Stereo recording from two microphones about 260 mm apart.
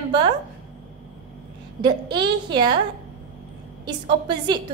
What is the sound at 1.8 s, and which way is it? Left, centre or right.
Speech, centre.